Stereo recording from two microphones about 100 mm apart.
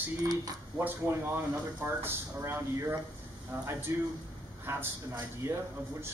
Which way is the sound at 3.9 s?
30° right (ahead or behind).